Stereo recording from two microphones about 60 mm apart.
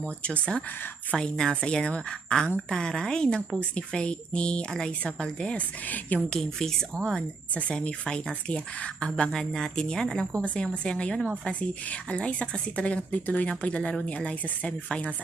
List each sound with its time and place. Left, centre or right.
0.2 s speech: centre
6.3 s speech: centre